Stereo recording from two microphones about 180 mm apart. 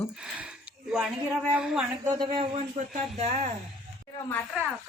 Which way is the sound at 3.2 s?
35° right (ahead or behind).